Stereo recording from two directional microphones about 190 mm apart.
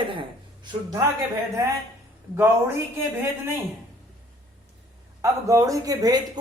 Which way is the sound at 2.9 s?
15° right (ahead or behind).